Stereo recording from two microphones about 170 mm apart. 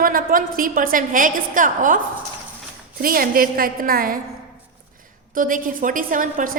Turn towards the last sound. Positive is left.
turn(degrees=-50)  # may be behind; listen again after turning